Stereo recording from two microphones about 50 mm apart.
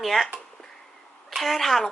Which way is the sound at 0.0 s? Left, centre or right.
Centre.